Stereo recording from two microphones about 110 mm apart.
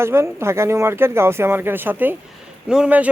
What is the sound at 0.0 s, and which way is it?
Speech, 25° right (ahead or behind).